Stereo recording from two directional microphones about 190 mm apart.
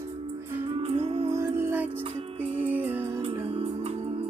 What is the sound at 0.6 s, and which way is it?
Music, 30° right (ahead or behind).